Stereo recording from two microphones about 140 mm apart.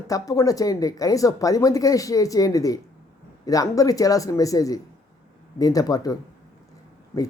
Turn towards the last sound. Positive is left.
turn(degrees=20)  # may be behind; listen again after turning